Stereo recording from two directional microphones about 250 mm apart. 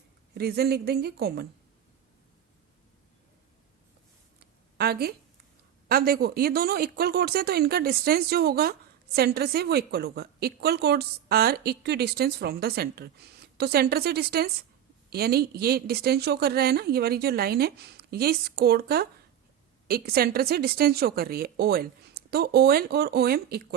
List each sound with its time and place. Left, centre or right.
0.3 s speech: right
4.4 s a sound: right
5.9 s speech: right